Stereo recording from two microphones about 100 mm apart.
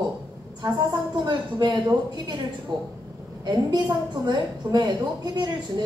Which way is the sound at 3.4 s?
45° right (ahead or behind).